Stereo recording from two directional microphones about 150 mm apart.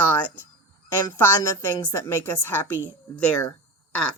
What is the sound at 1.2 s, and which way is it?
A woman's voice, 15° left (ahead or behind).